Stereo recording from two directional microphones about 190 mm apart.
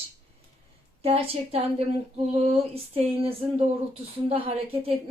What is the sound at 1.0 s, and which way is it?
Female singing, 30° right (ahead or behind).